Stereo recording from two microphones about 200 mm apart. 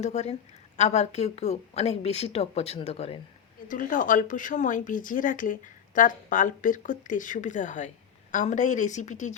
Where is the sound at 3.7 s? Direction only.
40° left (ahead or behind).